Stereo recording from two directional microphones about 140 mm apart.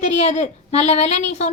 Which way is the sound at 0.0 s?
55° left (ahead or behind).